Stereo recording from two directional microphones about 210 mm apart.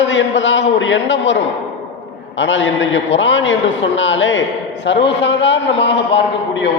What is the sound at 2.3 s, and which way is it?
A man's voice, 60° left (ahead or behind).